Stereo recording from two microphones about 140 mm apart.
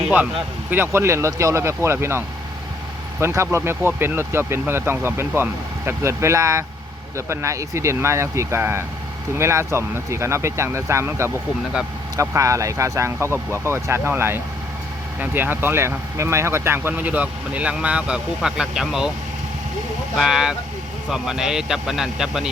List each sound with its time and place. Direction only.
0.7 s speech: 15° right (ahead or behind)
20.1 s speech: 5° right (ahead or behind)